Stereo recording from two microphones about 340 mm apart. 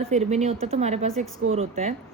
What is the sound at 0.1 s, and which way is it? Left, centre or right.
A woman's voice, centre.